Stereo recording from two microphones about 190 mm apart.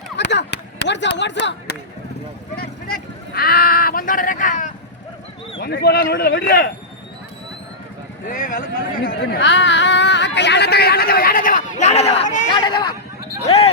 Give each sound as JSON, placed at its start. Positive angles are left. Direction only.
{"t": 0.2, "sound": "a sound", "side_deg": 65}
{"t": 2.6, "sound": "vehicle", "side_deg": 50}
{"t": 5.5, "sound": "speech", "side_deg": 55}
{"t": 8.3, "sound": "a man's voice", "side_deg": 45}
{"t": 9.0, "sound": "speech", "side_deg": 60}
{"t": 12.5, "sound": "speech", "side_deg": 25}